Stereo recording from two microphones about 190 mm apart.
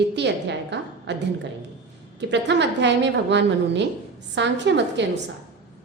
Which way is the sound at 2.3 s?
65° right (ahead or behind).